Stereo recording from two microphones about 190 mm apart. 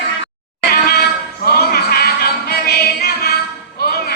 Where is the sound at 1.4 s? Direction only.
55° left (ahead or behind).